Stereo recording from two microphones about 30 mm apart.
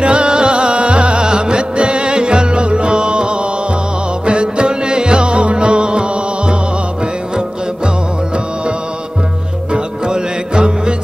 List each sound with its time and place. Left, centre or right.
0.0 s music: right
9.7 s music: right